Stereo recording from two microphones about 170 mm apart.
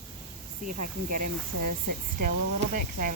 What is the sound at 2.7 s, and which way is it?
Speech, 55° right (ahead or behind).